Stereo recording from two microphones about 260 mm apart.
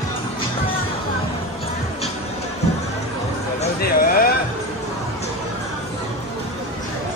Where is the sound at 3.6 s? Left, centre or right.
Left.